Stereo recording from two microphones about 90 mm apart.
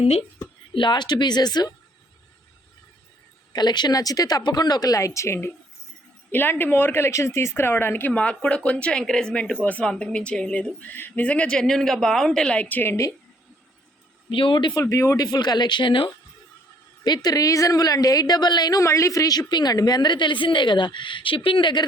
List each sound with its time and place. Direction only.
0.0 s speech: 90° left
0.7 s speech: 60° left (ahead or behind)
3.5 s a woman's voice: 50° left (ahead or behind); by 13.0 s 20° left (ahead or behind)
14.3 s speech: 70° left (ahead or behind)
14.8 s a woman's voice: 35° left (ahead or behind); by 16.1 s 65° left (ahead or behind)
17.0 s a woman's voice: 50° left (ahead or behind)